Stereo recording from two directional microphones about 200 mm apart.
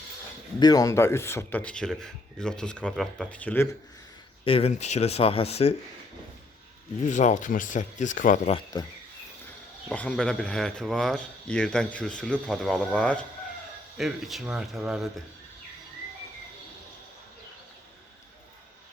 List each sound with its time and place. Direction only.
0.6 s speech: 20° left (ahead or behind)
4.4 s speech: 30° left (ahead or behind)
7.0 s speech: 35° left (ahead or behind)
8.5 s speech: 20° left (ahead or behind)
9.9 s speech: 5° left (ahead or behind)